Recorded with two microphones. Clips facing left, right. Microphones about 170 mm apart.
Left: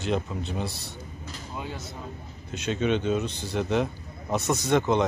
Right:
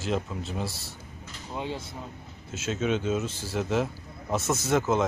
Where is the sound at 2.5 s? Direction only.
5° right (ahead or behind).